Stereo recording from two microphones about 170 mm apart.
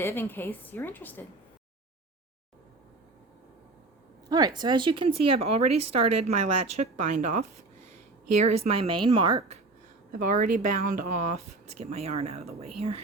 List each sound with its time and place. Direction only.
0.0 s a woman's voice: 15° left (ahead or behind)
4.3 s speech: 25° right (ahead or behind)
10.1 s speech: 55° right (ahead or behind); by 13.0 s 35° right (ahead or behind)